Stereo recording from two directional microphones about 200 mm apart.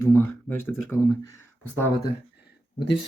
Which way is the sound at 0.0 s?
10° left (ahead or behind).